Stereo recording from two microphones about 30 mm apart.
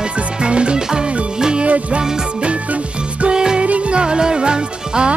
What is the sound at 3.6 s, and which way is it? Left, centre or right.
Music, right.